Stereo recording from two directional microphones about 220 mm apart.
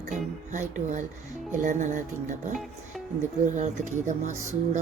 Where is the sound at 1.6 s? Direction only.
35° right (ahead or behind).